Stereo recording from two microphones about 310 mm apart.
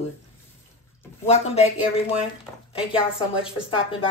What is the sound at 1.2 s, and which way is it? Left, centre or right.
Speech, centre.